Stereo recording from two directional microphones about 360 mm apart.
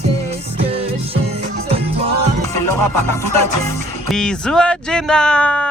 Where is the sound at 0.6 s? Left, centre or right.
Centre.